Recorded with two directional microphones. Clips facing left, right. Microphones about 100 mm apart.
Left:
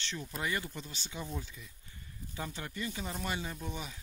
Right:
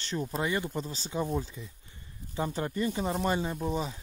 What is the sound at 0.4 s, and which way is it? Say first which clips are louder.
Speech: right 4 dB; 25° right (ahead or behind).